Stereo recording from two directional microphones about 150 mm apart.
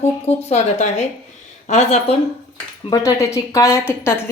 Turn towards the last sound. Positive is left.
turn(degrees=15)  # may be behind; listen again after turning